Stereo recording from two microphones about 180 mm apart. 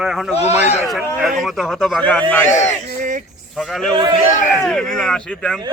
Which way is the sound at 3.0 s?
45° right (ahead or behind).